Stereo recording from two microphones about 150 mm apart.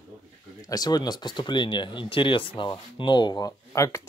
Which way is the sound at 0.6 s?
25° left (ahead or behind).